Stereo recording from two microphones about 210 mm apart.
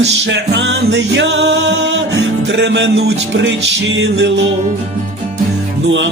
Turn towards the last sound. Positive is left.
turn(degrees=-55)  # may be behind; listen again after turning